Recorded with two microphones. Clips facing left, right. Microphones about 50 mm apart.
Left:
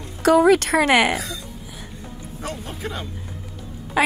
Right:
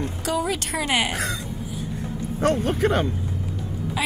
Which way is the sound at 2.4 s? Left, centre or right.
Right.